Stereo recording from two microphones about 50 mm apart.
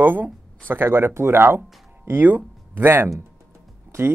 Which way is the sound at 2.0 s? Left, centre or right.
Right.